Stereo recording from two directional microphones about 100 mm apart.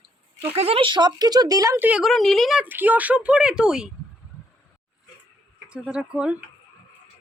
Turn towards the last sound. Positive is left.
turn(degrees=-10)  # may be behind; listen again after turning